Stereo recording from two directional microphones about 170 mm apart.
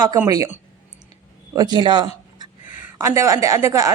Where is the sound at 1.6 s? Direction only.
25° right (ahead or behind).